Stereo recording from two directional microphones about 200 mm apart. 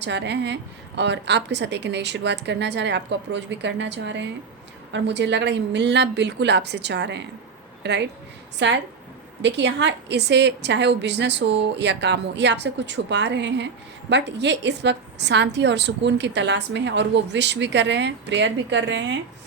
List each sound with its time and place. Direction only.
0.0 s a woman's voice: 60° right (ahead or behind)